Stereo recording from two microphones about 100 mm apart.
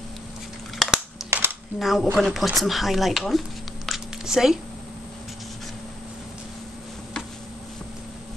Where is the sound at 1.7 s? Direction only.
Centre (ahead or behind).